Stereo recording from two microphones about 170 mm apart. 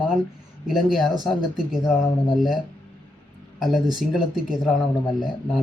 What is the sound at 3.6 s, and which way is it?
Speech, centre (ahead or behind).